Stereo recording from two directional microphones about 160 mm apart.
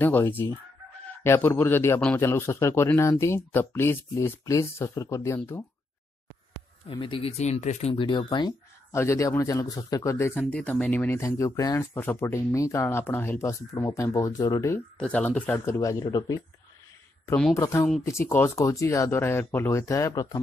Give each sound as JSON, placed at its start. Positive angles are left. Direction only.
{"t": 0.0, "sound": "speech", "side_deg": 10}
{"t": 6.9, "sound": "speech", "side_deg": 35}
{"t": 7.9, "sound": "speech", "side_deg": 30}
{"t": 8.9, "sound": "speech", "side_deg": 20}
{"t": 15.0, "sound": "speech", "side_deg": 10}
{"t": 17.6, "sound": "speech", "side_deg": 20}